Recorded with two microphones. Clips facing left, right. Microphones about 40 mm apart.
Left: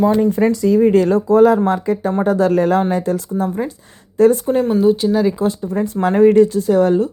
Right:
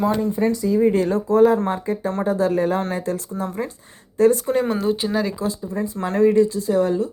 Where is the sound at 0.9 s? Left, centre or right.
Left.